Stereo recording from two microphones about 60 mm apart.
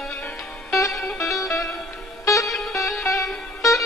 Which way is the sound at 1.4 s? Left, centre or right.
Left.